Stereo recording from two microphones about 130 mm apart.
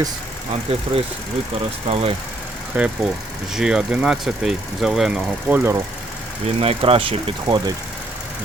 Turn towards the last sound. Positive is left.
turn(degrees=-35)  # may be behind; listen again after turning